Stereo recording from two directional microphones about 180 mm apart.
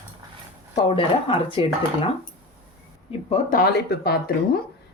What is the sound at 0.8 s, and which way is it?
Speech, 30° left (ahead or behind).